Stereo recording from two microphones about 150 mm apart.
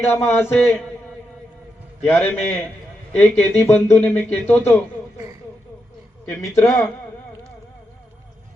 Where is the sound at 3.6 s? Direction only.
10° left (ahead or behind).